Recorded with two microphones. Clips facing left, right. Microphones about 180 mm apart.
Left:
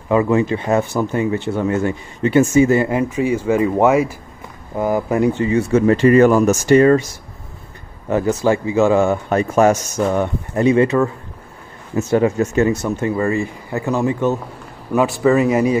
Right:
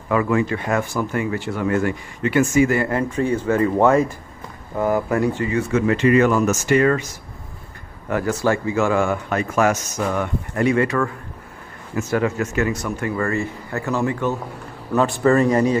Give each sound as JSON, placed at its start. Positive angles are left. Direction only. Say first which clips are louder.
{"t": 0.1, "sound": "speech", "louder": "left 4 dB", "side_deg": 25}
{"t": 8.1, "sound": "speech", "louder": "left 4 dB", "side_deg": 20}
{"t": 14.9, "sound": "speech", "louder": "left 2 dB", "side_deg": 5}